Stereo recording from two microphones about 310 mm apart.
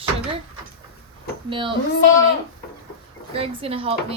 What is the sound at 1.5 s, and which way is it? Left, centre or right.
Speech, centre.